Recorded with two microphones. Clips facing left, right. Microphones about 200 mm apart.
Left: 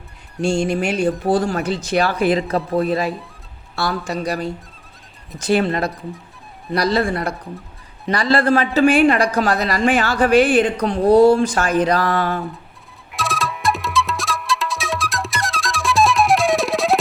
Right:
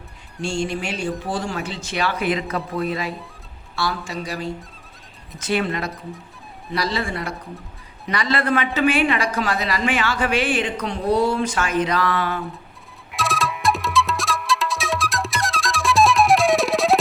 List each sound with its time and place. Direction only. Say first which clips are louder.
0.7 s a man's voice: left 7 dB; 50° left (ahead or behind)
1.3 s a woman's voice: left 8 dB; 40° left (ahead or behind)
3.8 s a woman's voice: left 4 dB; 45° left (ahead or behind)
6.8 s a man's voice: left 8 dB; 45° left (ahead or behind)
8.0 s a woman's voice: left 5 dB; 35° left (ahead or behind)
13.1 s music: even; centre (ahead or behind)